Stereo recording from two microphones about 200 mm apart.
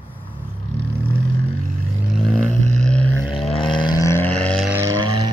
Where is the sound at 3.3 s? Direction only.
30° left (ahead or behind); by 4.7 s 5° left (ahead or behind).